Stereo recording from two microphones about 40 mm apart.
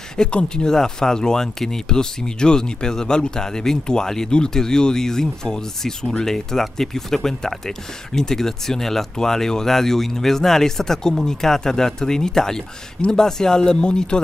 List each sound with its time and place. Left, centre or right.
0.2 s speech: left